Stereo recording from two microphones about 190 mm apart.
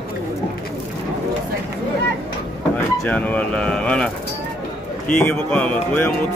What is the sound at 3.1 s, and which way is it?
Speech, 5° left (ahead or behind).